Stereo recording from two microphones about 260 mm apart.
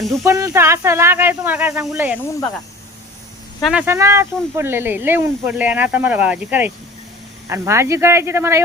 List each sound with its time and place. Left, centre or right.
0.3 s speech: centre
3.6 s speech: centre